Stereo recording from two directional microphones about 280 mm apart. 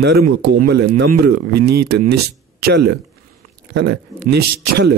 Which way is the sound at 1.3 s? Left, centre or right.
Right.